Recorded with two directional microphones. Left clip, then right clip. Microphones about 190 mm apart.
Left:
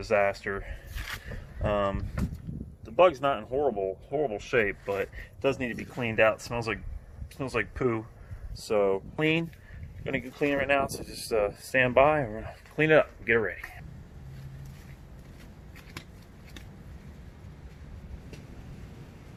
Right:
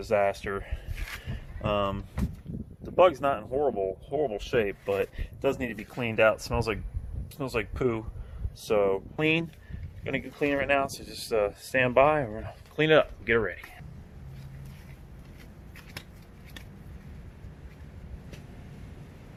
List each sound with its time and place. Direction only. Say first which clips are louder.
0.1 s speech: even; 25° right (ahead or behind)
8.6 s speech: right 1 dB; 5° right (ahead or behind)